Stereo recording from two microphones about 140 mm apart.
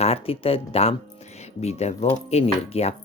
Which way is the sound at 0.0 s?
45° left (ahead or behind).